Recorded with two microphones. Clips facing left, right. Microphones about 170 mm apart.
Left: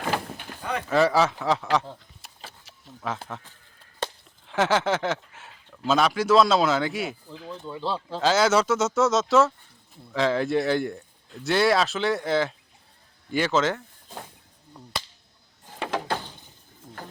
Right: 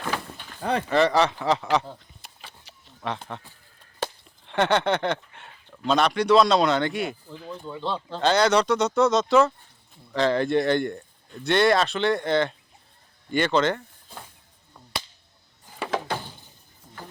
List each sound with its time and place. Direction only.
0.6 s speech: 35° right (ahead or behind)
0.9 s speech: centre (ahead or behind)